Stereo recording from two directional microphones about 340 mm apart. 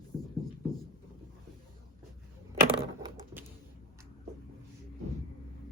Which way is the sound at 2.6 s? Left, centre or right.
Centre.